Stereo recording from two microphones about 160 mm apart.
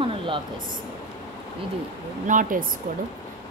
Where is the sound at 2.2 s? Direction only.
55° right (ahead or behind).